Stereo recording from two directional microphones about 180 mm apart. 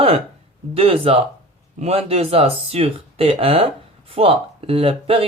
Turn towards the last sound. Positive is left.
turn(degrees=-30)  # may be behind; listen again after turning